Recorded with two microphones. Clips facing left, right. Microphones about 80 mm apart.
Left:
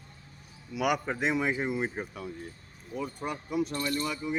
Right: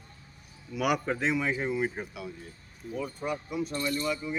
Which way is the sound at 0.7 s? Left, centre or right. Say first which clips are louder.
Right 1 dB; centre.